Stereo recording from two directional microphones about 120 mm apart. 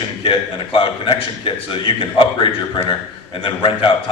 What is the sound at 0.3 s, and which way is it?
A man's voice, 50° left (ahead or behind).